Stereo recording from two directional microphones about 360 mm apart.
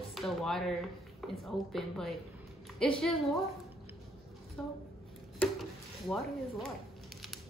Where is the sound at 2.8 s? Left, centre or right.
Centre.